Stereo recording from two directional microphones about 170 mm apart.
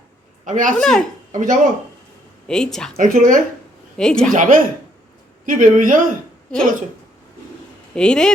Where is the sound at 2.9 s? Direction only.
55° right (ahead or behind).